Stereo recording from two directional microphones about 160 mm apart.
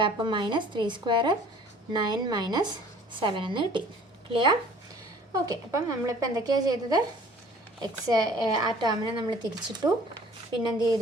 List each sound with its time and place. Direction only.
0.0 s a woman's voice: 30° right (ahead or behind)
10.6 s a woman's voice: 25° right (ahead or behind)